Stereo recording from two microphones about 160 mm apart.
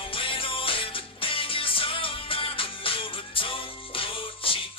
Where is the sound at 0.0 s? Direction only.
35° left (ahead or behind).